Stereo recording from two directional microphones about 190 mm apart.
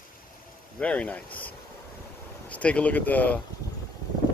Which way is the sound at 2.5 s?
5° left (ahead or behind).